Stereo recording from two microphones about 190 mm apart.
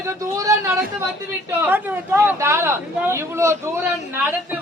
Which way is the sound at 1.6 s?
10° right (ahead or behind).